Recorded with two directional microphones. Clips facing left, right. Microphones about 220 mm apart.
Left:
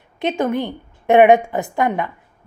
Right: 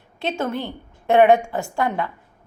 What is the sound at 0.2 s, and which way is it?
A woman's voice, 20° left (ahead or behind).